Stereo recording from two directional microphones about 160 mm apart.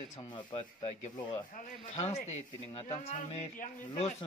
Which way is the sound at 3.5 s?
55° left (ahead or behind).